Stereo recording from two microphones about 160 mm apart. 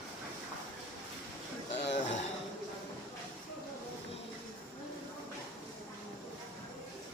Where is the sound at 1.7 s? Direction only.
90° left.